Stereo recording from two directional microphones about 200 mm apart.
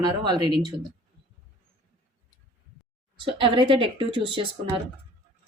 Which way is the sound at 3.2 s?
25° right (ahead or behind).